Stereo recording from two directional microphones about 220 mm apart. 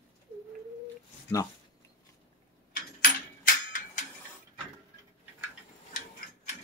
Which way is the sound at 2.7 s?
40° left (ahead or behind).